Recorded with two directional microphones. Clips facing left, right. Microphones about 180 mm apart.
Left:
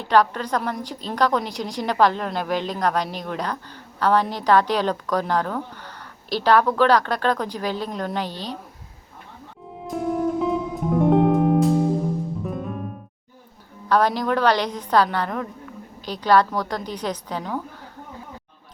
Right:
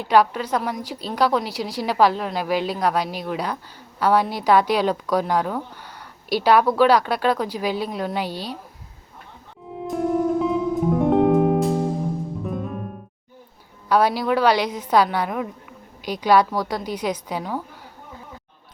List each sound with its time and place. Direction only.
0.0 s a woman's voice: 10° right (ahead or behind)
9.8 s music: centre (ahead or behind)
13.8 s a woman's voice: 10° right (ahead or behind)